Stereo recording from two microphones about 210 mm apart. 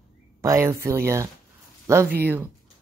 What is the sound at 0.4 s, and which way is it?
Speech, 15° right (ahead or behind).